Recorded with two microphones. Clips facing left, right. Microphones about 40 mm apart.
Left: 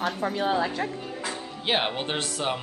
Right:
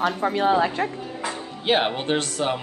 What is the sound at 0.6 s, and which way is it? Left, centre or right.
Speech, right.